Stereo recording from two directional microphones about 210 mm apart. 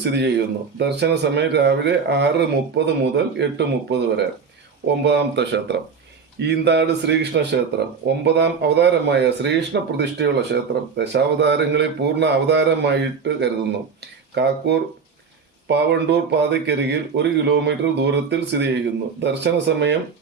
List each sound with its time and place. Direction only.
0.0 s a man's voice: 55° right (ahead or behind)